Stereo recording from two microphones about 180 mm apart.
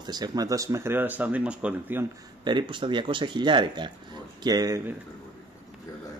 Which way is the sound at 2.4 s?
25° right (ahead or behind).